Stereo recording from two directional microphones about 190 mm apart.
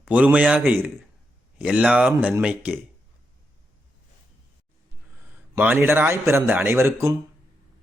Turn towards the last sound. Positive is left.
turn(degrees=-15)  # may be behind; listen again after turning